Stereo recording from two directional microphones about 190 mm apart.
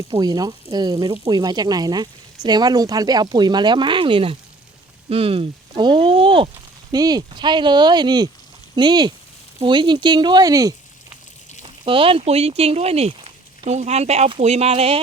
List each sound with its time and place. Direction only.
0.1 s speech: 20° right (ahead or behind)